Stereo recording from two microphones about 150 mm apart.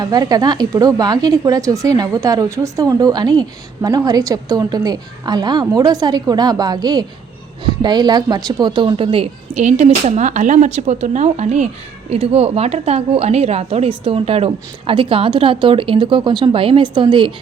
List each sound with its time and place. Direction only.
0.0 s a woman's voice: 25° right (ahead or behind)